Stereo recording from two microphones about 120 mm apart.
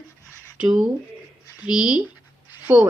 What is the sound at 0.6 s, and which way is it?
Speech, 15° right (ahead or behind).